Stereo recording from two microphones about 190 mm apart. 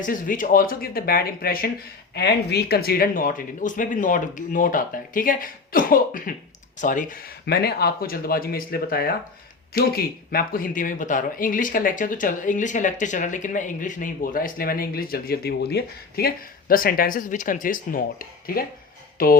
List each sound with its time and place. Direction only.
0.0 s speech: 45° left (ahead or behind)
19.1 s speech: 50° left (ahead or behind)